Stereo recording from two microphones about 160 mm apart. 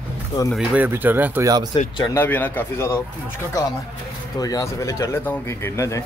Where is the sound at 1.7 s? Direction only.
30° left (ahead or behind).